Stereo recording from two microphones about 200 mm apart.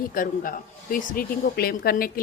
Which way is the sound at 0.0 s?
45° left (ahead or behind).